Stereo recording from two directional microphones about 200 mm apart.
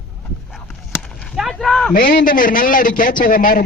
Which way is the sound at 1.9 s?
40° left (ahead or behind).